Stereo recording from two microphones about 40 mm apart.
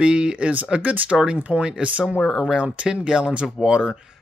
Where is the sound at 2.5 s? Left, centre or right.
Right.